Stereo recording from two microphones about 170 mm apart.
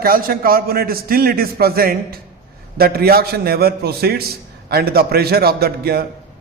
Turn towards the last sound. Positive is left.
turn(degrees=-65)  # may be behind; listen again after turning